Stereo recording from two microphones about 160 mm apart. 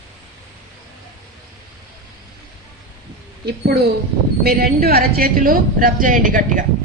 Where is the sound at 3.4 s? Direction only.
90° right.